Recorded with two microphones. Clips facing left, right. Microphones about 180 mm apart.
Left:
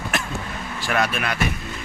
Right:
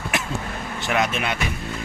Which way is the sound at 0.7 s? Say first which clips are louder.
Even; 20° right (ahead or behind).